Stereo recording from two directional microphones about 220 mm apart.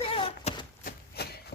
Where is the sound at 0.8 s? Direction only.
45° left (ahead or behind).